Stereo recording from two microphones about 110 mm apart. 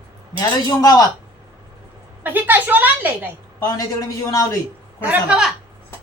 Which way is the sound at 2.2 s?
15° right (ahead or behind).